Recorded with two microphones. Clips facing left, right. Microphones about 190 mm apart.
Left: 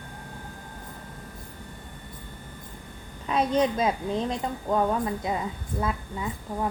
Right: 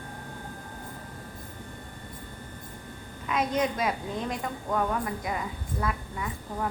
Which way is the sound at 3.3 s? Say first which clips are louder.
Left 4 dB; 30° left (ahead or behind).